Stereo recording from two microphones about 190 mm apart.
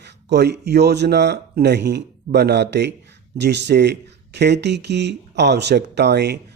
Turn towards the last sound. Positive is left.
turn(degrees=-60)  # may be behind; listen again after turning